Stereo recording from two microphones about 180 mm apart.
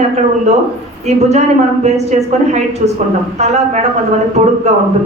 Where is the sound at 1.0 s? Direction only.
40° right (ahead or behind).